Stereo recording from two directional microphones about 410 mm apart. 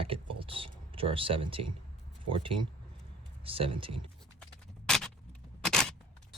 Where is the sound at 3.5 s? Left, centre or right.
Centre.